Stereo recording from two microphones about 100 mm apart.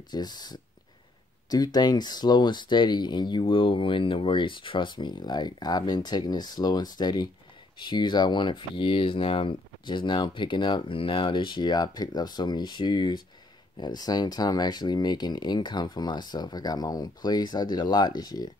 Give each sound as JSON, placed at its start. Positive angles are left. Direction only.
{"t": 0.1, "sound": "speech", "side_deg": 45}